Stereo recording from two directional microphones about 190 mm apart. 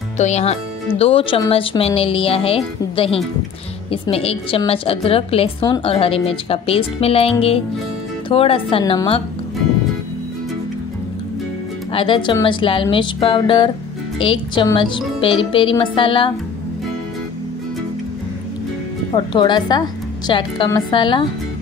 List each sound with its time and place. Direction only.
0.2 s a woman's voice: 35° left (ahead or behind)
11.9 s speech: 25° left (ahead or behind)
19.1 s speech: 25° left (ahead or behind)